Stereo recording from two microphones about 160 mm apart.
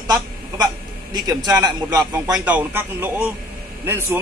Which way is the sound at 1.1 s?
25° right (ahead or behind).